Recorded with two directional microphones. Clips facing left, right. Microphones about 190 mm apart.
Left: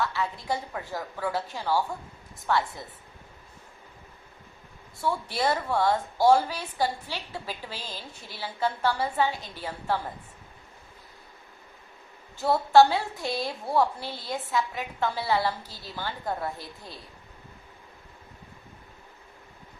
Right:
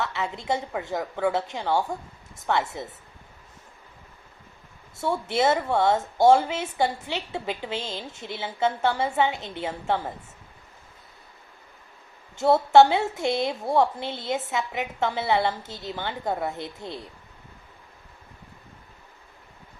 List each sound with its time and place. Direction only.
0.0 s speech: 20° right (ahead or behind)
4.9 s speech: 25° right (ahead or behind)
12.4 s speech: 20° right (ahead or behind)